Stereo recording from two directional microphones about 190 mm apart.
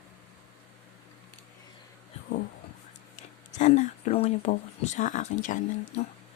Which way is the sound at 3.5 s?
40° left (ahead or behind).